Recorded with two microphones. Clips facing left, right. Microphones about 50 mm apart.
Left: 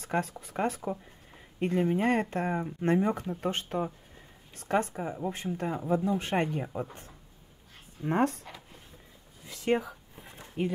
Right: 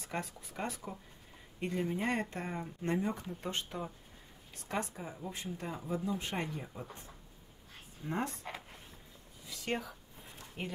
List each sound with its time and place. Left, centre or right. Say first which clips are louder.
0.2 s speech: left 9 dB; left
6.2 s speech: left 9 dB; left
6.6 s speech: left 10 dB; left
9.7 s speech: left 9 dB; centre
10.6 s speech: left 10 dB; centre